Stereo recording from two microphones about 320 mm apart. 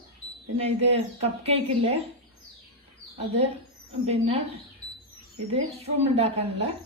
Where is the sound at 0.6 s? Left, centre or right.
Centre.